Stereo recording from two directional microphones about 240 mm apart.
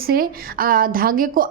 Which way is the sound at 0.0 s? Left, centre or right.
Right.